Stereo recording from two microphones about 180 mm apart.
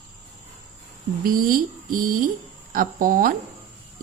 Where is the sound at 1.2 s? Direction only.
55° right (ahead or behind).